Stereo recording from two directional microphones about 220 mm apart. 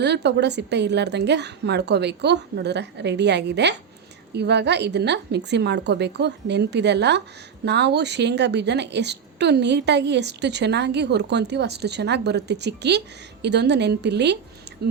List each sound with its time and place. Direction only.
0.0 s a woman's voice: 50° right (ahead or behind)